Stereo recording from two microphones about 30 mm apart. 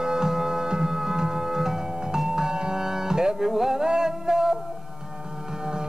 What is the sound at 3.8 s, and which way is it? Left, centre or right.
Music, right.